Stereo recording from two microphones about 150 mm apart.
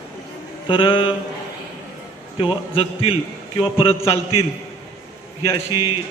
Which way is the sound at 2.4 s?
40° left (ahead or behind).